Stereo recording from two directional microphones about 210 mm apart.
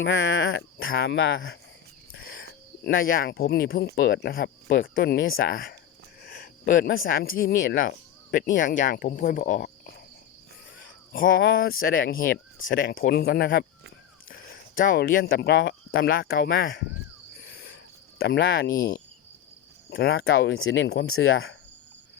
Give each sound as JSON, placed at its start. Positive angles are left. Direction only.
{"t": 0.0, "sound": "speech", "side_deg": 65}
{"t": 0.9, "sound": "speech", "side_deg": 50}
{"t": 2.8, "sound": "speech", "side_deg": 45}
{"t": 11.1, "sound": "speech", "side_deg": 45}
{"t": 14.3, "sound": "a sound", "side_deg": 40}
{"t": 15.3, "sound": "speech", "side_deg": 55}
{"t": 17.4, "sound": "a sound", "side_deg": 50}
{"t": 18.2, "sound": "speech", "side_deg": 55}
{"t": 20.3, "sound": "speech", "side_deg": 70}